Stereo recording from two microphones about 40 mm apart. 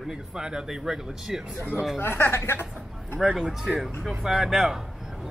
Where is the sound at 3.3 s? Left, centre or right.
Centre.